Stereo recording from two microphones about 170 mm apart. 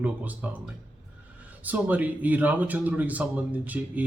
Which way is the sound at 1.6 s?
10° right (ahead or behind).